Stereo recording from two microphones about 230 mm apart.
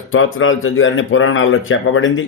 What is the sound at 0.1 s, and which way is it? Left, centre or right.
Speech, left.